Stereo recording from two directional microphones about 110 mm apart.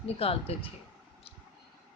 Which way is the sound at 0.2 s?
60° left (ahead or behind).